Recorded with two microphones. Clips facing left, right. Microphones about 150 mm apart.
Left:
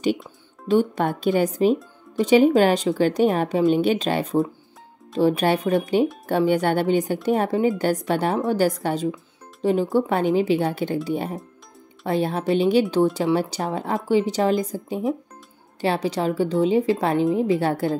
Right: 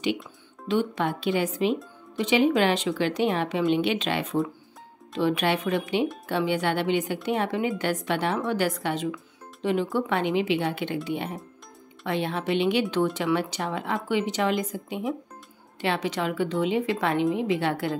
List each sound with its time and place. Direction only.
0.7 s a woman's voice: 45° left (ahead or behind)